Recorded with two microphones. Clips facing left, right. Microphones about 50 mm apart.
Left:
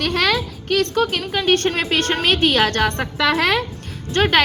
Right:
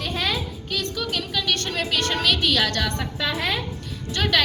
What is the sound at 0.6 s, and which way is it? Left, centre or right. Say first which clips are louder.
A woman's voice: left 12 dB; left.